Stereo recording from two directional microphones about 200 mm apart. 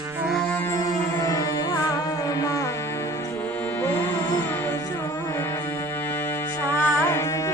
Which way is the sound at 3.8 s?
10° left (ahead or behind).